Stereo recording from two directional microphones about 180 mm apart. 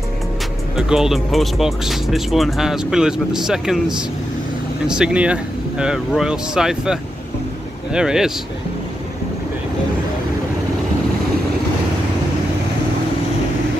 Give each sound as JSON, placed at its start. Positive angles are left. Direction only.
{"t": 0.7, "sound": "speech", "side_deg": -5}
{"t": 4.8, "sound": "speech", "side_deg": -5}